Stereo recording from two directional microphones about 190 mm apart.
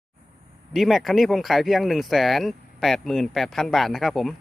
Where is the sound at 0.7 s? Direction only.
Centre (ahead or behind).